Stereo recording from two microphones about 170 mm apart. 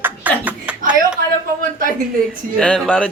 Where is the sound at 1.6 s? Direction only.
55° right (ahead or behind).